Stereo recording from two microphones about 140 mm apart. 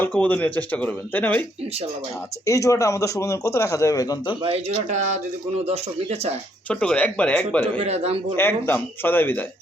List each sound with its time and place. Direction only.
0.0 s speech: 10° left (ahead or behind)
2.5 s a man's voice: 20° left (ahead or behind)
4.4 s speech: 50° right (ahead or behind)
6.7 s speech: 10° left (ahead or behind)
7.9 s speech: 50° right (ahead or behind)
8.4 s speech: 15° left (ahead or behind)